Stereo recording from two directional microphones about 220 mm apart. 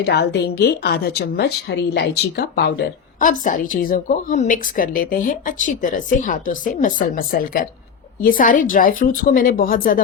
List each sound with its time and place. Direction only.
0.0 s a woman's voice: 50° left (ahead or behind)